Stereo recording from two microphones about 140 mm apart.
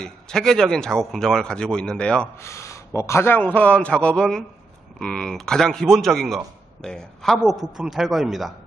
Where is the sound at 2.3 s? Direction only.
20° left (ahead or behind).